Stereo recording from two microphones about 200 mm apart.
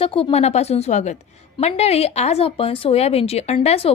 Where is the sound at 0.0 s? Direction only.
30° left (ahead or behind).